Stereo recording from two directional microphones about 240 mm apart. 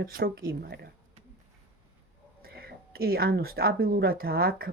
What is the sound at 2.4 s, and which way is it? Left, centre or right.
Speech, right.